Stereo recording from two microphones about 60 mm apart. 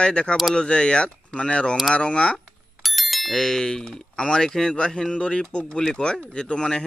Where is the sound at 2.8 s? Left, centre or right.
Centre.